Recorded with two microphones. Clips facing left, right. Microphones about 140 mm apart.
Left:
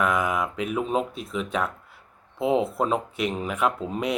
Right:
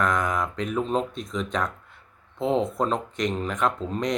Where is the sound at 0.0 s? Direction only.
5° left (ahead or behind).